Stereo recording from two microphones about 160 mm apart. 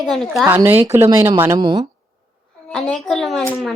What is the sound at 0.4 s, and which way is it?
Speech, 15° right (ahead or behind).